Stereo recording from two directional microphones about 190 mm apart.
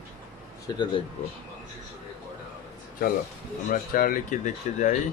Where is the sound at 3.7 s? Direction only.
50° left (ahead or behind).